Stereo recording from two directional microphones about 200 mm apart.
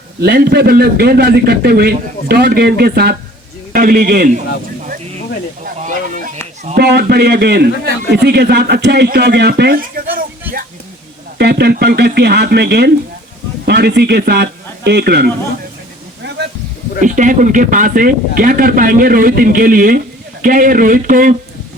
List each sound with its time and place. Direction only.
0.2 s speech: 50° right (ahead or behind)
5.6 s a sound: 40° right (ahead or behind)
6.7 s speech: 55° right (ahead or behind)
11.3 s speech: 55° right (ahead or behind)
17.0 s speech: 40° right (ahead or behind)